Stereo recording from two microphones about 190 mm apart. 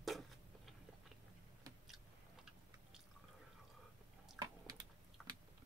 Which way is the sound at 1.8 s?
Centre (ahead or behind).